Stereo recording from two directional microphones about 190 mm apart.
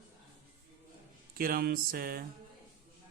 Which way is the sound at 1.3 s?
50° right (ahead or behind).